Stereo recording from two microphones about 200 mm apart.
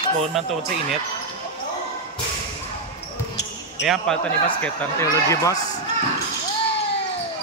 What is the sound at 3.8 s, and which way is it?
Speech, centre (ahead or behind).